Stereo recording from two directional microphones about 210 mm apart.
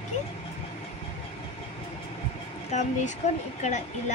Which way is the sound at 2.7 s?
35° left (ahead or behind).